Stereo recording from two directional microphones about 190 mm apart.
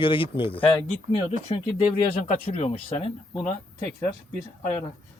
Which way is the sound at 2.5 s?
30° left (ahead or behind).